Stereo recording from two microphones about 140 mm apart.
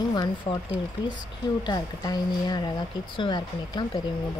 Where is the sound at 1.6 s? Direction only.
30° left (ahead or behind).